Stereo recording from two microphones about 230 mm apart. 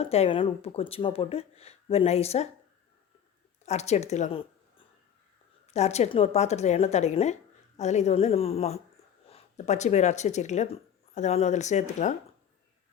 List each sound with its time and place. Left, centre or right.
0.0 s speech: left
3.7 s speech: left
5.7 s speech: left